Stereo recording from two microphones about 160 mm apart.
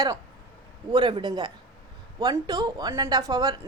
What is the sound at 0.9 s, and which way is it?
A woman's voice, 30° right (ahead or behind).